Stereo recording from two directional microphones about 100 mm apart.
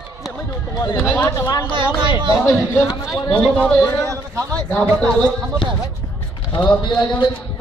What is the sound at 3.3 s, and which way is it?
Speech, 10° left (ahead or behind).